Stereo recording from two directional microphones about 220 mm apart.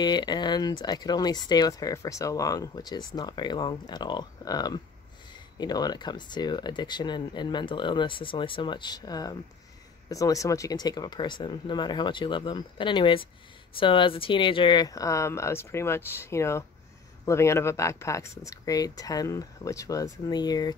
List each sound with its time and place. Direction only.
0.0 s speech: 20° left (ahead or behind)